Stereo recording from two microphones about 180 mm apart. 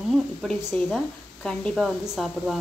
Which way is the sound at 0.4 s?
Centre (ahead or behind).